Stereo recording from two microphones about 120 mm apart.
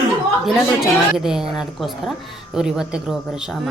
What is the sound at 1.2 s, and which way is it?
Speech, 5° right (ahead or behind).